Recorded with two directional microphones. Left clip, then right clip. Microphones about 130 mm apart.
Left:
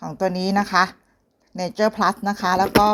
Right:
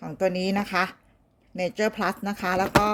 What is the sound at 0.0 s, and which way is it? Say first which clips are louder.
Speech: left 2 dB; 15° right (ahead or behind).